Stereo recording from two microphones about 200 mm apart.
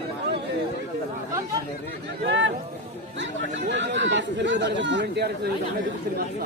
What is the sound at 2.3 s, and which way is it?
Speech, 65° right (ahead or behind).